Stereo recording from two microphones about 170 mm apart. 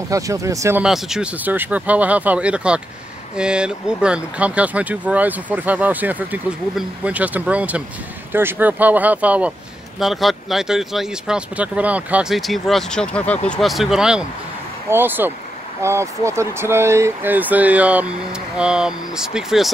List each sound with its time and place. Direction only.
0.1 s speech: 20° right (ahead or behind)
0.8 s speech: centre (ahead or behind)